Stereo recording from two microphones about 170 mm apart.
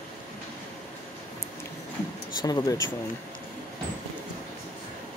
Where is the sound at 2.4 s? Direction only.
20° left (ahead or behind).